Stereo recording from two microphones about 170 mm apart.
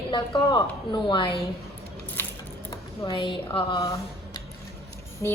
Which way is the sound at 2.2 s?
10° left (ahead or behind).